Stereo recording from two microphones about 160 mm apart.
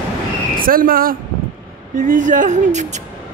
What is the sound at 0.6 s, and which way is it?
A man's voice, 65° right (ahead or behind).